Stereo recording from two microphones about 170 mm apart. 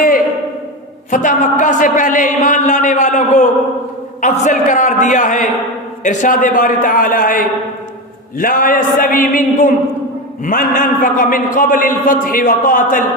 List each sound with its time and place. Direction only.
1.1 s a man's voice: 50° left (ahead or behind)